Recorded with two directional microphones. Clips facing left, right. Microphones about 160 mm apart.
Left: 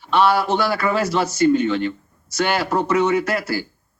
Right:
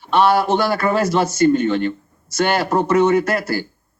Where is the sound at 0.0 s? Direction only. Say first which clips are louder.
Right 2 dB; 45° right (ahead or behind).